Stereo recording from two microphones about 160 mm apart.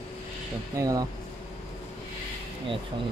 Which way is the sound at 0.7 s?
20° right (ahead or behind).